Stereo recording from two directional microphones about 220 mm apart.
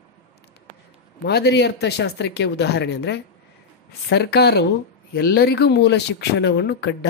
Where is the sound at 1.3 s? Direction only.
50° left (ahead or behind).